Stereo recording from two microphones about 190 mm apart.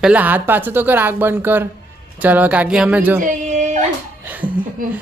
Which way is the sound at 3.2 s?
40° right (ahead or behind).